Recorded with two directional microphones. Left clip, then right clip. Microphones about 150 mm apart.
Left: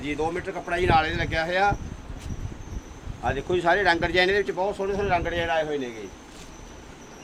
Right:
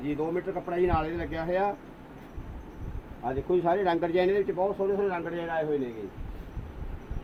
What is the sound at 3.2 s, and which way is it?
Speech, centre (ahead or behind).